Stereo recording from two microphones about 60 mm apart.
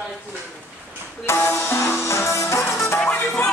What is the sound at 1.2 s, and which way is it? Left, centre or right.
Music, left.